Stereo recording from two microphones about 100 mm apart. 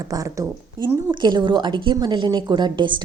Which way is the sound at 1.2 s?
50° right (ahead or behind).